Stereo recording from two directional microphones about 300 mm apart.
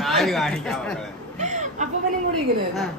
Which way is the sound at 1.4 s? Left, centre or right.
Right.